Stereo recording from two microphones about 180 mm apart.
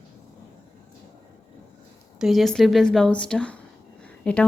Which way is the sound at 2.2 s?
Centre (ahead or behind).